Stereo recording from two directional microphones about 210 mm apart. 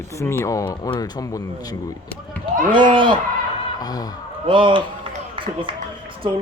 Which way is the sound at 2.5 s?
40° right (ahead or behind).